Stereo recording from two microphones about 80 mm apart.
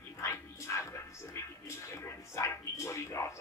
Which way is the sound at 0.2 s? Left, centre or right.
Left.